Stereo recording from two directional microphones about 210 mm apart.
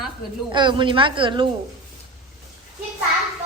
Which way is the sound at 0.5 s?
20° right (ahead or behind).